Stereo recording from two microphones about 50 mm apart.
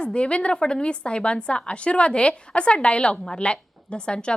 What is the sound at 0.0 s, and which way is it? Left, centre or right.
A woman's voice, left.